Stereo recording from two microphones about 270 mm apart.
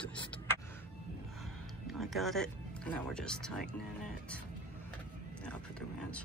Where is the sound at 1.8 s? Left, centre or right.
Centre.